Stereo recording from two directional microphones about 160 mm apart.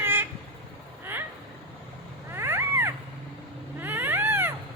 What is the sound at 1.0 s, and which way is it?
Vehicle, 15° right (ahead or behind).